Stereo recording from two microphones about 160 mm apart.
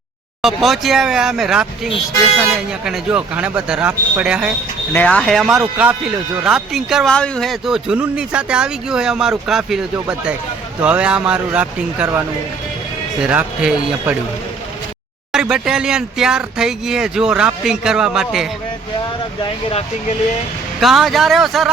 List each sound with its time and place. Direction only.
0.4 s speech: centre (ahead or behind)
4.9 s speech: 5° left (ahead or behind); by 12.2 s 10° right (ahead or behind)
13.2 s speech: 5° right (ahead or behind)
15.3 s speech: 5° right (ahead or behind)
19.4 s speech: 40° left (ahead or behind)
20.8 s speech: centre (ahead or behind)